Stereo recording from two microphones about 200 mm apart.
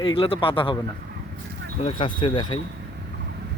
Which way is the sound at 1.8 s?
25° left (ahead or behind).